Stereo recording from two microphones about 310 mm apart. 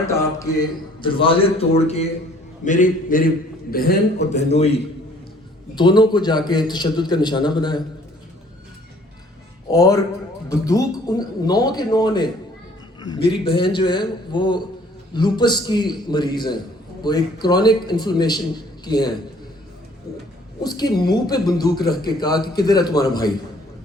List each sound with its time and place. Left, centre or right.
0.1 s a man's voice: centre
9.6 s a man's voice: centre
20.6 s a man's voice: centre